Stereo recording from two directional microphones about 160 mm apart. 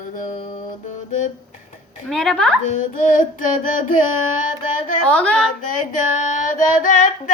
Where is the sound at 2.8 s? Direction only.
55° left (ahead or behind).